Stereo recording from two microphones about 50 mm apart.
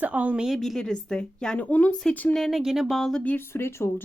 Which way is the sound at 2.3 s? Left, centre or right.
Centre.